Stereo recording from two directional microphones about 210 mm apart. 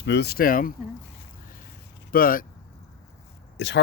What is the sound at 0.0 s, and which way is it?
Speech, 55° left (ahead or behind).